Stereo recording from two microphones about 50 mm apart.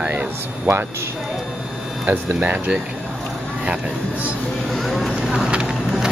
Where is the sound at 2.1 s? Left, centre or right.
Right.